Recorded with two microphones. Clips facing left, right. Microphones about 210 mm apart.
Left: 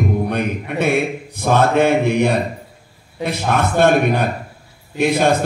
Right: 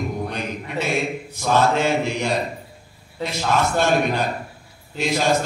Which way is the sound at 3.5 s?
55° left (ahead or behind).